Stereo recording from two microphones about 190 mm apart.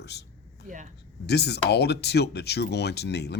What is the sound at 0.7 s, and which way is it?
Speech, 45° right (ahead or behind).